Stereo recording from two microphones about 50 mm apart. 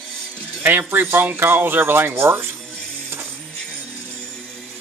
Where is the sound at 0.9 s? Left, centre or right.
Right.